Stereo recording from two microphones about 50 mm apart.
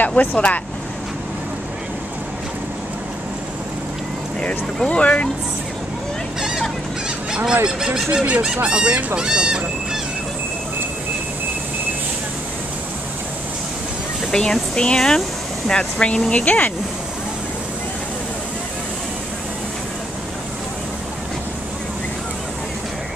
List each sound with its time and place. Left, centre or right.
0.0 s speech: left
4.8 s speech: left
7.2 s honk: centre
7.6 s speech: centre
14.3 s speech: centre; by 16.7 s left